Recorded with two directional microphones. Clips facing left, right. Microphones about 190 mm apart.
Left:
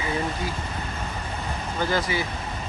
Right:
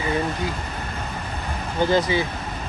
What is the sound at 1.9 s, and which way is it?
Speech, 20° right (ahead or behind).